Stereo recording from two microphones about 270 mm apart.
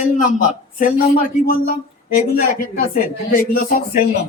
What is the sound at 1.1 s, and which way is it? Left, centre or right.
Speech, left.